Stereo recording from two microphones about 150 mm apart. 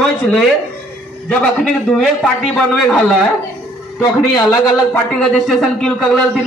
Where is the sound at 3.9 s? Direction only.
25° left (ahead or behind).